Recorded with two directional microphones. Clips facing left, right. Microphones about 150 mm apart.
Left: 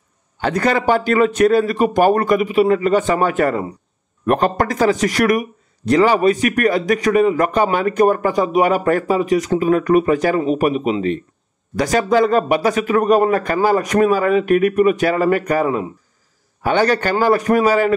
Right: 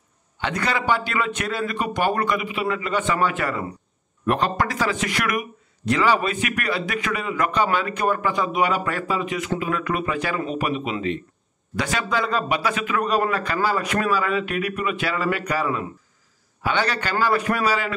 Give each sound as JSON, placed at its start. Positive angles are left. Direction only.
{"t": 0.4, "sound": "speech", "side_deg": 40}